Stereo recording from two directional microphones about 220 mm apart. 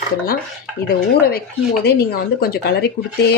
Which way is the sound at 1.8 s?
45° left (ahead or behind).